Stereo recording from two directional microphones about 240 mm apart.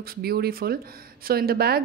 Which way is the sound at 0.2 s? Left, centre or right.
Right.